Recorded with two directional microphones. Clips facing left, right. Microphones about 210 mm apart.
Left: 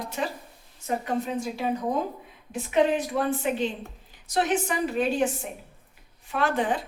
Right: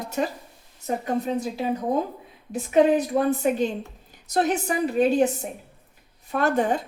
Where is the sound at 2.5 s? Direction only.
40° right (ahead or behind).